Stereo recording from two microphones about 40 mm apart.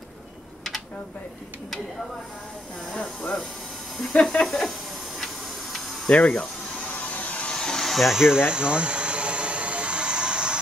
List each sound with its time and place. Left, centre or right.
2.9 s speech: left
4.5 s speech: centre
6.0 s speech: left
6.9 s vacuum cleaner: left
7.6 s vacuum cleaner: centre
8.1 s a sound: centre